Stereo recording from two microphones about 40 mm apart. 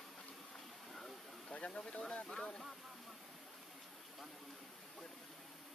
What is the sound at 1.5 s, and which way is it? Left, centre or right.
Speech, left.